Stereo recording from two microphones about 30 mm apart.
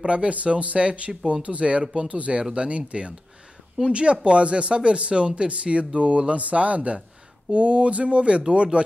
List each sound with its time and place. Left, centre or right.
0.0 s speech: right